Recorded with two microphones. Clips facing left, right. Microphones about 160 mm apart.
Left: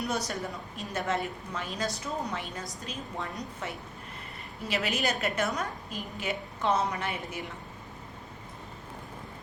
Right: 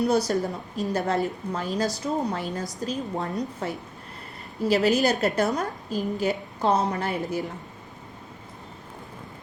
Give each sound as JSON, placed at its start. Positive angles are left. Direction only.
{"t": 0.0, "sound": "a woman's voice", "side_deg": -35}
{"t": 4.7, "sound": "a woman's voice", "side_deg": -40}